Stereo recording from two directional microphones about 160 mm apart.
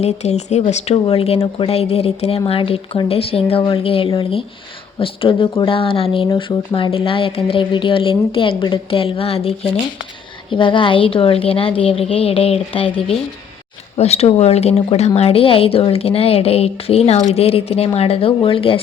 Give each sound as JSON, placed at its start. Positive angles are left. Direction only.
{"t": 0.0, "sound": "speech", "side_deg": 45}